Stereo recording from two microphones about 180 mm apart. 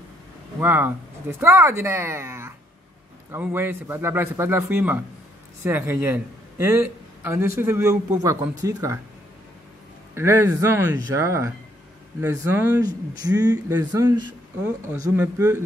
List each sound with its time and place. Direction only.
0.6 s a man's voice: 10° right (ahead or behind)
10.1 s a man's voice: 15° right (ahead or behind)